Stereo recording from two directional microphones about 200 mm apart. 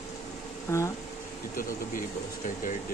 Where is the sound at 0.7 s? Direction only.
15° left (ahead or behind).